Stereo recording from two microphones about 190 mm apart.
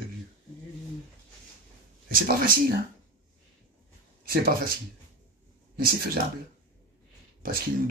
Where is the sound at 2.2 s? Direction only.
50° right (ahead or behind).